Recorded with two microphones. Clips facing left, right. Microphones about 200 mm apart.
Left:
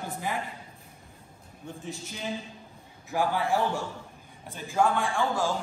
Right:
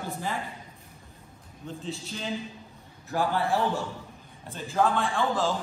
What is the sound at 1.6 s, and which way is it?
Speech, 15° left (ahead or behind).